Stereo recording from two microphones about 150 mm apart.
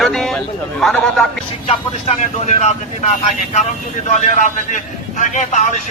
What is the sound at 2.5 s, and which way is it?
Speech, 50° left (ahead or behind).